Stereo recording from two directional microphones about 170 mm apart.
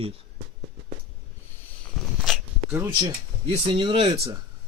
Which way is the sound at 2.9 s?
25° right (ahead or behind).